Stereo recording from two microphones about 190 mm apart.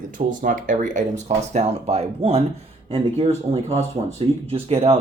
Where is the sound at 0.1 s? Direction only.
45° right (ahead or behind).